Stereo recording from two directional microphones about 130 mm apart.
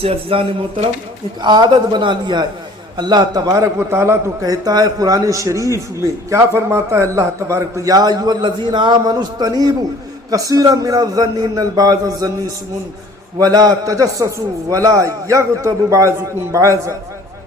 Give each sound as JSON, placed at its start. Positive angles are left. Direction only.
{"t": 0.0, "sound": "speech", "side_deg": -50}
{"t": 1.4, "sound": "a man's voice", "side_deg": -35}
{"t": 13.4, "sound": "a man's voice", "side_deg": -30}